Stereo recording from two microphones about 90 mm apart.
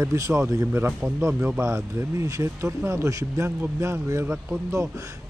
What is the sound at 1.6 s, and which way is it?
Speech, 30° right (ahead or behind).